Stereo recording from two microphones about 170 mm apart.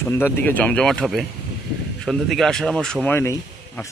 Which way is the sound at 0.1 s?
10° left (ahead or behind).